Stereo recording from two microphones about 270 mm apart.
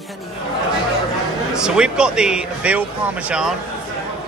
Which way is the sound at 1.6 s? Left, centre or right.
Centre.